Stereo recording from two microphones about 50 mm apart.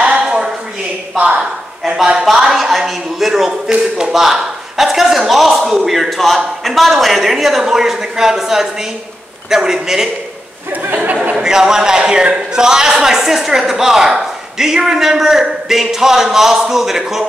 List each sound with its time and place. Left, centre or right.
0.0 s a sound: centre
1.1 s speech: right
2.1 s a woman's voice: centre
10.7 s speech: right
11.3 s a woman's voice: centre